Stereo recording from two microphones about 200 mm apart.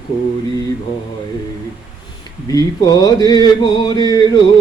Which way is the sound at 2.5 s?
20° left (ahead or behind).